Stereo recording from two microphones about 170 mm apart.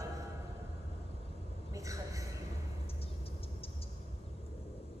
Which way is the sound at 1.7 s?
20° right (ahead or behind).